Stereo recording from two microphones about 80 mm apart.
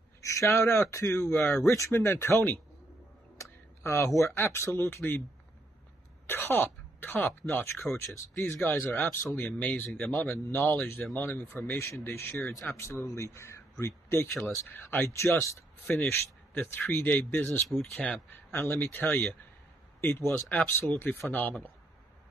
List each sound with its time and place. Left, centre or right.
0.2 s speech: left
3.3 s speech: left
6.2 s throat clearing: left
7.2 s speech: left
14.7 s speech: left
15.0 s speech: left
15.9 s speech: left
17.6 s speech: centre
17.9 s speech: centre